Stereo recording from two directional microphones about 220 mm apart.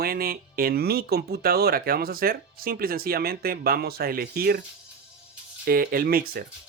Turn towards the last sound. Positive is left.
turn(degrees=-40)  # may be behind; listen again after turning